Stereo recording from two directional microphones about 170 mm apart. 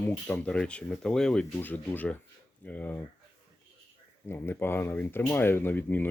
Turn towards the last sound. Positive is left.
turn(degrees=10)  # may be behind; listen again after turning